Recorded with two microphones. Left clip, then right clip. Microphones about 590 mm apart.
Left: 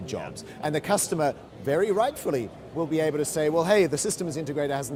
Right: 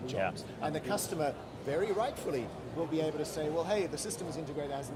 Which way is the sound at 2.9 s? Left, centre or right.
Left.